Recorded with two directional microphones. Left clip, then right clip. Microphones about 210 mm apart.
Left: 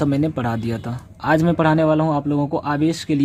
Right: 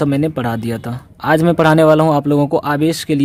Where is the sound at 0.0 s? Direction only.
20° right (ahead or behind).